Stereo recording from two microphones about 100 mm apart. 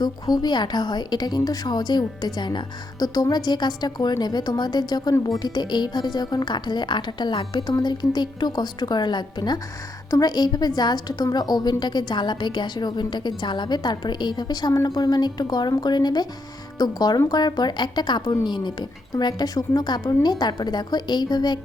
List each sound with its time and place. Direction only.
0.0 s a woman's voice: 45° left (ahead or behind)
14.7 s speech: 30° left (ahead or behind)
14.9 s a woman's voice: 45° left (ahead or behind)